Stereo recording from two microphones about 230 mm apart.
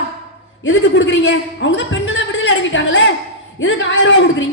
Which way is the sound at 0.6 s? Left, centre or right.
Left.